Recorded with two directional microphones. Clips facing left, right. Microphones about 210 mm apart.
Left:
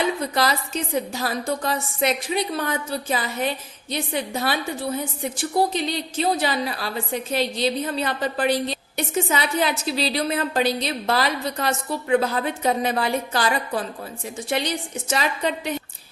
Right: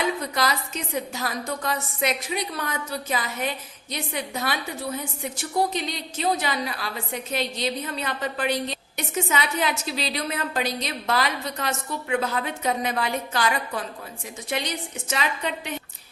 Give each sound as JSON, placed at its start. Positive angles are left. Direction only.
{"t": 0.2, "sound": "a woman's voice", "side_deg": 30}